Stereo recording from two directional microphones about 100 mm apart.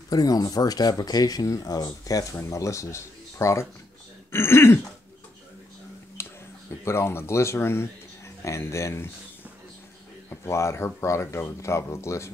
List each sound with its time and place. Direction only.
0.1 s speech: 40° left (ahead or behind)
6.2 s a sound: 25° left (ahead or behind)
6.8 s speech: 25° left (ahead or behind)
10.3 s speech: 25° left (ahead or behind)